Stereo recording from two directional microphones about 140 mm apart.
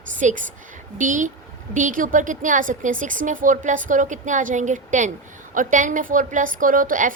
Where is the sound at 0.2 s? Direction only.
65° right (ahead or behind).